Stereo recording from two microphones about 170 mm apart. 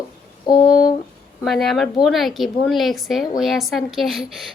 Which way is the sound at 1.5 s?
Centre (ahead or behind).